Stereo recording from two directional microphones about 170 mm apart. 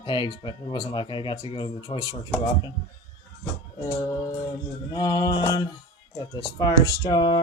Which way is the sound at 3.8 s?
20° left (ahead or behind).